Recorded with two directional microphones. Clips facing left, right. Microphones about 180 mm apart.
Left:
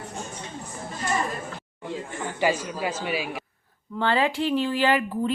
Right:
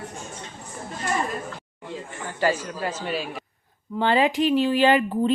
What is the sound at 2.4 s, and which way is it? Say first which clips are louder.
Speech: right 1 dB; 10° left (ahead or behind).